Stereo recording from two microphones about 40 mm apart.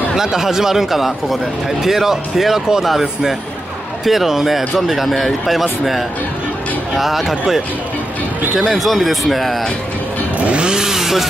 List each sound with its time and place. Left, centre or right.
0.1 s speech: centre
8.7 s speech: centre
10.4 s chainsaw: right
10.7 s speech: centre